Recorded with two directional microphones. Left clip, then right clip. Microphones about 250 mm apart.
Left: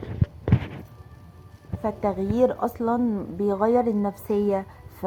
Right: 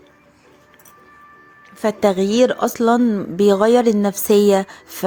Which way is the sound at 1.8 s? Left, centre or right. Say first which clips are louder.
Right 9 dB; right.